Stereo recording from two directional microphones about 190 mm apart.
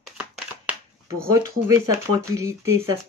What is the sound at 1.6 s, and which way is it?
Speech, 15° right (ahead or behind).